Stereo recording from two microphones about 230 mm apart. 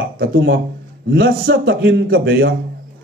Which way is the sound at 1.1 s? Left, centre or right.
Right.